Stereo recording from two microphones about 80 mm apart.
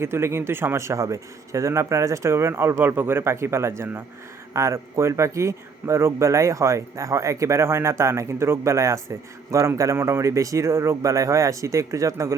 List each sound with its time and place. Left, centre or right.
0.0 s speech: right